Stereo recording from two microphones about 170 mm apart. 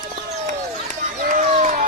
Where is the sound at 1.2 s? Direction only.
50° right (ahead or behind).